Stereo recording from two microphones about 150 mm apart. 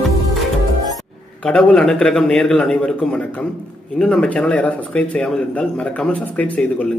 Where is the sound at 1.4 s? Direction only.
5° left (ahead or behind).